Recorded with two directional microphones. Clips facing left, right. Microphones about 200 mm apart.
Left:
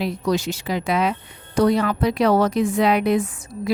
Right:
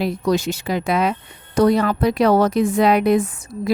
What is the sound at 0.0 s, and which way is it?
A woman's voice, 50° right (ahead or behind).